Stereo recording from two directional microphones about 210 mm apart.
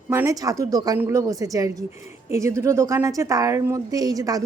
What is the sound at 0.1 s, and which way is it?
A woman's voice, 15° right (ahead or behind).